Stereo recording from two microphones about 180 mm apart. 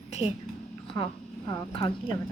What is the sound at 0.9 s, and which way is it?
Speech, 25° left (ahead or behind).